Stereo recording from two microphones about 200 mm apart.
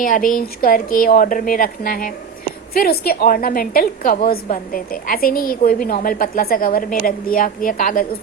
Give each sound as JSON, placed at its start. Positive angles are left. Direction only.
{"t": 0.0, "sound": "a woman's voice", "side_deg": 40}